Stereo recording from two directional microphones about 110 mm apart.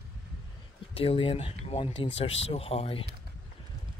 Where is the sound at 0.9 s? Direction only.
55° left (ahead or behind).